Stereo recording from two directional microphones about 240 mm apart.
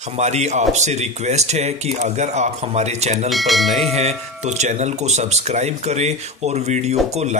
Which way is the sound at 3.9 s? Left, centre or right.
Right.